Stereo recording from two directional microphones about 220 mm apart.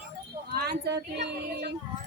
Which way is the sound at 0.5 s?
45° right (ahead or behind).